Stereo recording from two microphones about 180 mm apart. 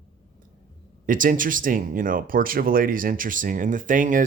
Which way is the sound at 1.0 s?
50° right (ahead or behind).